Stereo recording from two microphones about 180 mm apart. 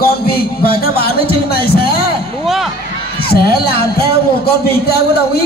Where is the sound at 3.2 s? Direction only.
60° left (ahead or behind).